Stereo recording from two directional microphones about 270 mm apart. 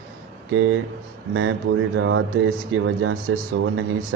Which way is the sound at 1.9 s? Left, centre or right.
Right.